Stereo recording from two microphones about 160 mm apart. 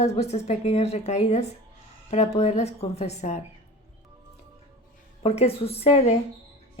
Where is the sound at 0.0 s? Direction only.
40° left (ahead or behind).